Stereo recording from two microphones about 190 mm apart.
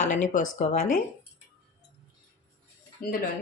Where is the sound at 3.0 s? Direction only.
50° left (ahead or behind).